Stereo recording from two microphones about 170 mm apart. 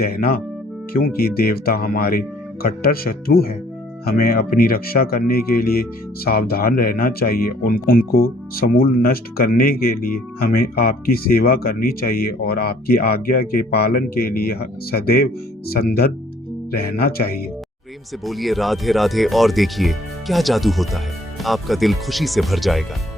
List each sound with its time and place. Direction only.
0.0 s speech: 65° left (ahead or behind)
18.3 s speech: centre (ahead or behind)